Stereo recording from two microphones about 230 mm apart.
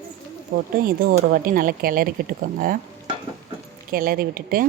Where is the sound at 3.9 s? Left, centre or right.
Right.